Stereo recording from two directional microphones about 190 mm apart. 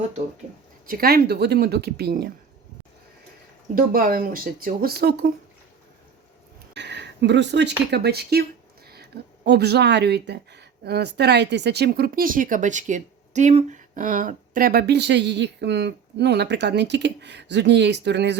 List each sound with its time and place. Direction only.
0.9 s speech: 50° right (ahead or behind)
3.8 s speech: 50° right (ahead or behind)
6.7 s a sound: 65° right (ahead or behind)
7.9 s speech: 60° right (ahead or behind)